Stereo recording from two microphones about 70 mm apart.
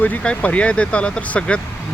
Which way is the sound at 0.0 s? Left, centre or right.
Centre.